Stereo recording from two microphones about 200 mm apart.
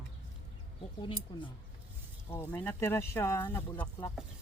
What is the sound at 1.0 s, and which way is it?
Speech, 25° left (ahead or behind).